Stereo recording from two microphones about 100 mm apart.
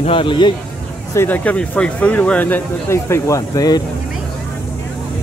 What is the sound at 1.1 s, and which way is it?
Speech, 20° left (ahead or behind).